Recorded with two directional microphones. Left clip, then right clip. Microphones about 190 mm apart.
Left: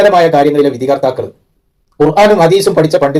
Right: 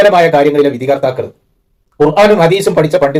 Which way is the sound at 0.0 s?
5° left (ahead or behind).